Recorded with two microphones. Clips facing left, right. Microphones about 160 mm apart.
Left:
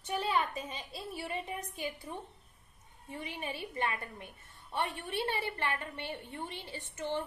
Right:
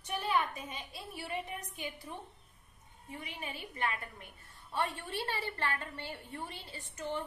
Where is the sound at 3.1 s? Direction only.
30° left (ahead or behind).